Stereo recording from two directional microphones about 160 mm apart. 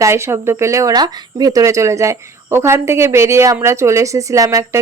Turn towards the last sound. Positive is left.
turn(degrees=-20)  # may be behind; listen again after turning